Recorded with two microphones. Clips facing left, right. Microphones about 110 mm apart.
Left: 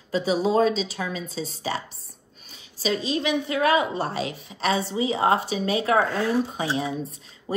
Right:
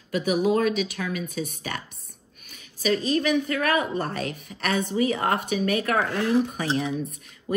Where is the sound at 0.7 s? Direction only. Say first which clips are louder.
Right 1 dB; 55° right (ahead or behind).